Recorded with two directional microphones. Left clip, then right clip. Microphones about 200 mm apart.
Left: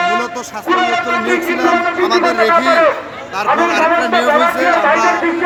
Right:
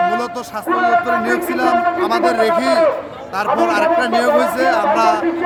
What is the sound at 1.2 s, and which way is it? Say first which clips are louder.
Speech: left 2 dB; 20° right (ahead or behind).